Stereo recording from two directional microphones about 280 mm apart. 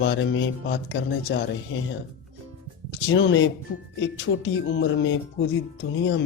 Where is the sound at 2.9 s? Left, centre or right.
Left.